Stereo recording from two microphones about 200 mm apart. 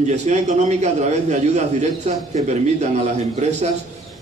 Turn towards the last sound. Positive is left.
turn(degrees=-35)  # may be behind; listen again after turning